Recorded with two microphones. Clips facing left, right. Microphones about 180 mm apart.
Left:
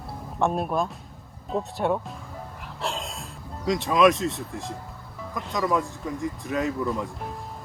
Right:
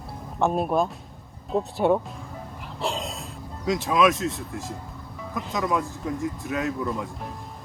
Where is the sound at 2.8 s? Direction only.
Centre (ahead or behind).